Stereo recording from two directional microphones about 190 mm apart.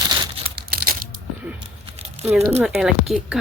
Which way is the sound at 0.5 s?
50° right (ahead or behind).